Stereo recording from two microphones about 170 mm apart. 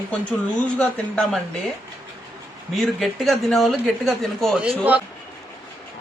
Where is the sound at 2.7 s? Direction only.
Centre (ahead or behind).